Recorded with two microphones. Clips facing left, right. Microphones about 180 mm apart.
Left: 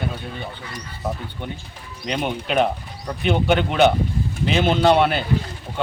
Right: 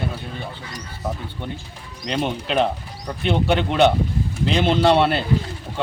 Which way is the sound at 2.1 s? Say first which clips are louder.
Right 1 dB; 5° left (ahead or behind).